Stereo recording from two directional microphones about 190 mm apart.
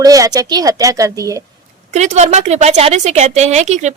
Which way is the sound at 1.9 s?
35° right (ahead or behind).